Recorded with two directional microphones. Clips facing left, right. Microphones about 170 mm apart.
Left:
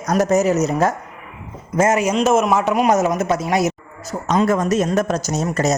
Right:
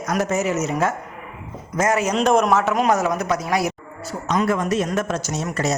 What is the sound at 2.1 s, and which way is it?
A man's voice, 5° left (ahead or behind).